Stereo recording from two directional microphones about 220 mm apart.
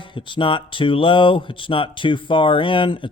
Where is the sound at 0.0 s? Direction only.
20° left (ahead or behind).